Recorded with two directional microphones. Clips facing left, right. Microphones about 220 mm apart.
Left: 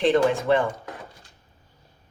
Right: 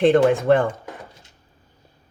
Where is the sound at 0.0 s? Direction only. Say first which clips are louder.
Right 5 dB; 55° right (ahead or behind).